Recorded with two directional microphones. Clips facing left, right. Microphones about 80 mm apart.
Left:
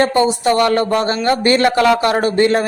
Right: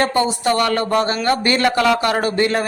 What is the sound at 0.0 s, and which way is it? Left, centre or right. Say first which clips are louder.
Speech: left 4 dB; left.